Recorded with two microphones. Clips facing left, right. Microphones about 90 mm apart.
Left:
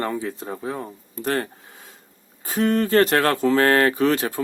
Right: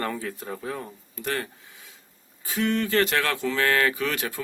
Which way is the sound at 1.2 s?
35° left (ahead or behind).